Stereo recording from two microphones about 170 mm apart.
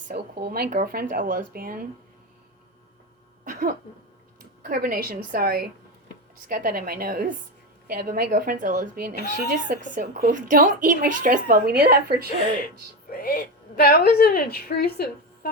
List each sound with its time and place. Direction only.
0.1 s a woman's voice: 65° right (ahead or behind)
3.4 s a sound: 50° right (ahead or behind)
4.6 s a woman's voice: 55° right (ahead or behind)
13.1 s a woman's voice: 65° left (ahead or behind)